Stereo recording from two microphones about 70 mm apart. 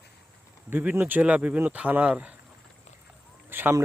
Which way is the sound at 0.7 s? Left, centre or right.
Right.